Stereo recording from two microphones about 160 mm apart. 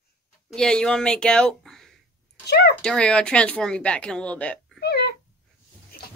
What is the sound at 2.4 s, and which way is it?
Speech, 85° left.